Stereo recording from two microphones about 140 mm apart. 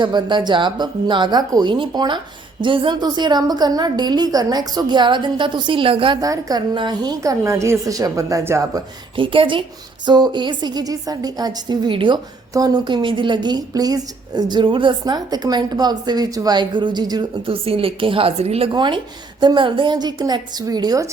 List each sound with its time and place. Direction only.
0.0 s a woman's voice: 30° right (ahead or behind)
6.2 s a woman's voice: 25° right (ahead or behind)
9.1 s a woman's voice: 40° right (ahead or behind)
18.7 s a woman's voice: 35° right (ahead or behind)